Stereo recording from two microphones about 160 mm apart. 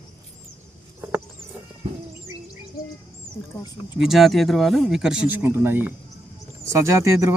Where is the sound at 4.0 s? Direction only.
Centre (ahead or behind); by 7.3 s 20° right (ahead or behind).